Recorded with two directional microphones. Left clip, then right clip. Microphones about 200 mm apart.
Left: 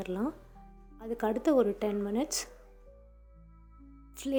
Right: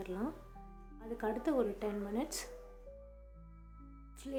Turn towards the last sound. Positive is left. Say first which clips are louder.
# left 11 dB
turn(degrees=35)  # may be behind; listen again after turning